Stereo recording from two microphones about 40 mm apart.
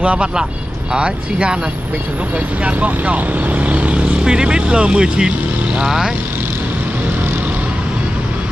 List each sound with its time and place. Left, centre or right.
0.0 s speech: right
2.6 s speech: right